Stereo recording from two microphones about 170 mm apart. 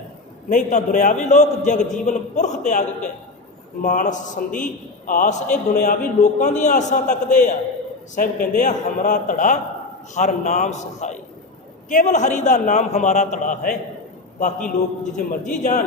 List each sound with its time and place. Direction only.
0.5 s a man's voice: 45° left (ahead or behind)